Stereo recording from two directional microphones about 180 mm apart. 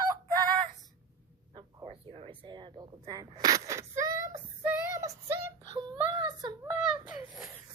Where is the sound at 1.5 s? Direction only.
25° right (ahead or behind).